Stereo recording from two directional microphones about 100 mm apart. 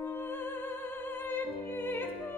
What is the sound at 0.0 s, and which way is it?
Music, 20° left (ahead or behind).